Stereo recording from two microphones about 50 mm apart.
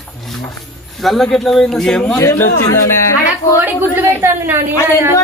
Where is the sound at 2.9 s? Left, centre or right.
Left.